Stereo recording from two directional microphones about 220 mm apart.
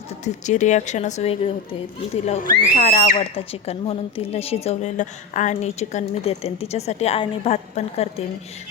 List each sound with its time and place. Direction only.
0.3 s speech: 35° left (ahead or behind)